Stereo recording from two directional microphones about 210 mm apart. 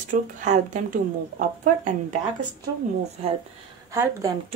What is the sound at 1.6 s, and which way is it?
Speech, 40° right (ahead or behind).